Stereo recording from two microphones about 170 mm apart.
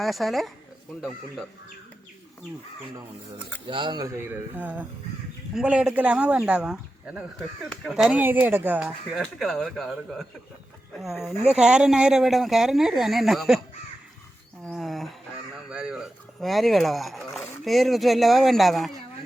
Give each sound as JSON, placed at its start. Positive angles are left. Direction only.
{"t": 0.0, "sound": "speech", "side_deg": 0}
{"t": 3.7, "sound": "speech", "side_deg": -25}
{"t": 9.1, "sound": "speech", "side_deg": 0}
{"t": 14.7, "sound": "speech", "side_deg": 0}